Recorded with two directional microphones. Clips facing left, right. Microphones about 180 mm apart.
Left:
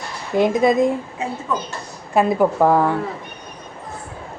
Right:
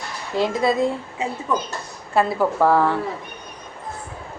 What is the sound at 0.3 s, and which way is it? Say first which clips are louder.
Speech: left 4 dB; 20° left (ahead or behind).